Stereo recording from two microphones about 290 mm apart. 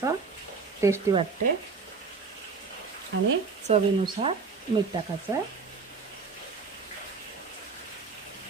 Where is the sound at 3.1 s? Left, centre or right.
Right.